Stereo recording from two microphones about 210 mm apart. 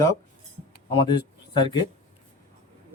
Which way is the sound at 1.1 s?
20° left (ahead or behind).